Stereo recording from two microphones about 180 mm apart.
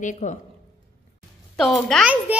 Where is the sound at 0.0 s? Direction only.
45° left (ahead or behind).